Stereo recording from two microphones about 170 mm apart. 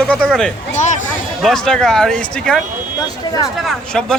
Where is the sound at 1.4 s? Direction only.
5° left (ahead or behind).